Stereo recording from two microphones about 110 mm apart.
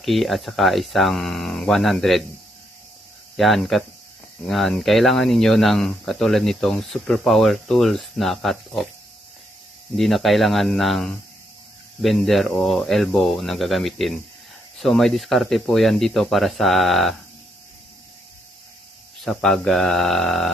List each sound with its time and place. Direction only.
0.0 s speech: centre (ahead or behind)
3.3 s speech: centre (ahead or behind)
9.9 s speech: centre (ahead or behind)
19.2 s speech: 5° left (ahead or behind)